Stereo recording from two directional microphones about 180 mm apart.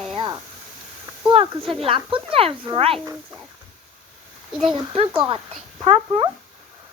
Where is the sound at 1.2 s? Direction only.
30° right (ahead or behind).